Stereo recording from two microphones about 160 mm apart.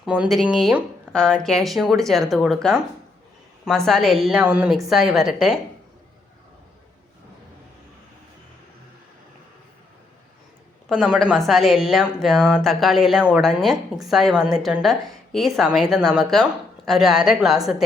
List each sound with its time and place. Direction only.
0.0 s speech: 5° right (ahead or behind)
10.8 s a woman's voice: centre (ahead or behind)